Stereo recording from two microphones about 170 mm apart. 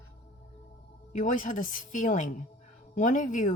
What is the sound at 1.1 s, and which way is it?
Speech, 50° left (ahead or behind).